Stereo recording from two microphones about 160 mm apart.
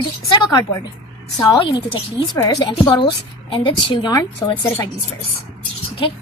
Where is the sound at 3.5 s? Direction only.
30° left (ahead or behind).